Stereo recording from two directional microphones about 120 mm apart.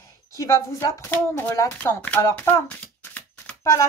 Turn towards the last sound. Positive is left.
turn(degrees=15)  # may be behind; listen again after turning